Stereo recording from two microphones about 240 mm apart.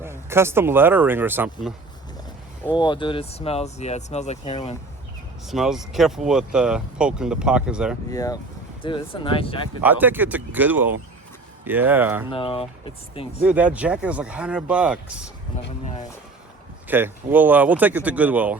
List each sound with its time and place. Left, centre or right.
0.0 s speech: centre
2.7 s speech: centre
5.5 s speech: centre
8.1 s speech: centre
9.8 s speech: centre
12.3 s speech: left
13.4 s speech: centre
15.8 s speech: left
16.9 s speech: centre